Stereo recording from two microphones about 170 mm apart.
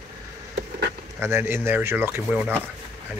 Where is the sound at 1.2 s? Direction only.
15° right (ahead or behind).